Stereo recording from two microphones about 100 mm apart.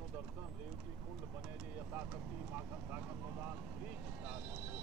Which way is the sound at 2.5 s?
20° right (ahead or behind).